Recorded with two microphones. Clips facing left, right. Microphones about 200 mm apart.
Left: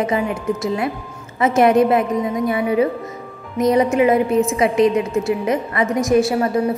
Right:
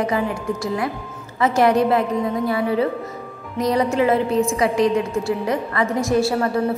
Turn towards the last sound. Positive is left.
turn(degrees=20)  # may be behind; listen again after turning